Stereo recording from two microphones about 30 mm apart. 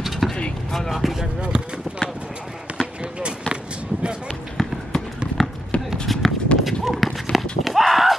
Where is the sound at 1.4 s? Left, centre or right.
Right.